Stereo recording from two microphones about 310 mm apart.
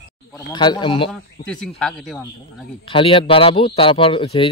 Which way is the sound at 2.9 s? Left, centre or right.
Centre.